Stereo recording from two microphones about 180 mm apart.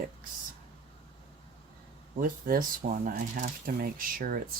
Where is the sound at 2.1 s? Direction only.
50° right (ahead or behind).